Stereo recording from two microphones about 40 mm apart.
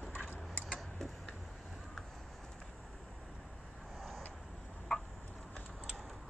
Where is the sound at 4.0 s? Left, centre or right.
Centre.